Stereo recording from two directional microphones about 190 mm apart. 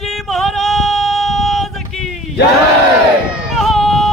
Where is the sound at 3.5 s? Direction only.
Centre (ahead or behind).